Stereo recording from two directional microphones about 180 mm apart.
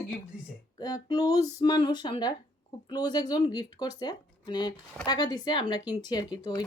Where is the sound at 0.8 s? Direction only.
20° left (ahead or behind).